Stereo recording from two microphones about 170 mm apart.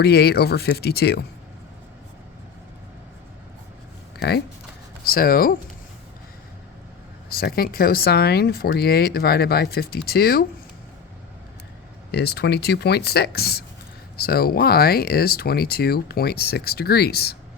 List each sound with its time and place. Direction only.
0.0 s speech: 75° left (ahead or behind)
5.0 s speech: 60° left (ahead or behind)
7.3 s speech: 65° left (ahead or behind)
12.1 s speech: 75° left (ahead or behind)